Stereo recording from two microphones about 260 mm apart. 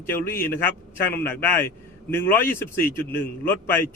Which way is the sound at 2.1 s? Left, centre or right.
Centre.